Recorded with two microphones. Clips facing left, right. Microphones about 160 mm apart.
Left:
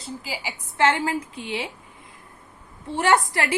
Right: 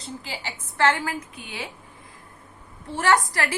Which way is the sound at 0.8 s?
25° left (ahead or behind).